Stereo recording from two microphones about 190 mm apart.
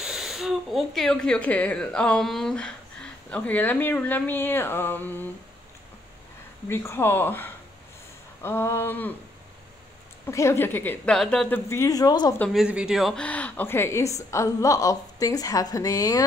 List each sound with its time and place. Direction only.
0.0 s speech: centre (ahead or behind)
6.7 s speech: 15° left (ahead or behind)
10.2 s speech: 15° left (ahead or behind)
12.5 s speech: 5° right (ahead or behind); by 16.3 s 20° left (ahead or behind)